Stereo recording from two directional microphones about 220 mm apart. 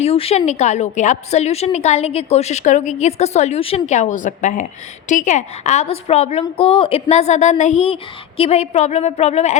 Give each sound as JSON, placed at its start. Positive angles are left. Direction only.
{"t": 0.0, "sound": "a woman's voice", "side_deg": 25}